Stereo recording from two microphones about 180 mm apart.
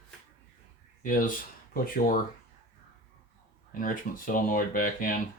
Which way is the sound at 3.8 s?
50° left (ahead or behind).